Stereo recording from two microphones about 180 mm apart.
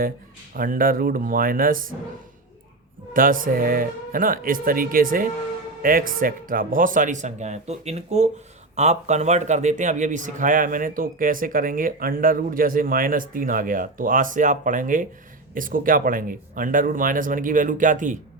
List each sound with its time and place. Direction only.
0.5 s a man's voice: 50° right (ahead or behind)
3.1 s a man's voice: 50° right (ahead or behind)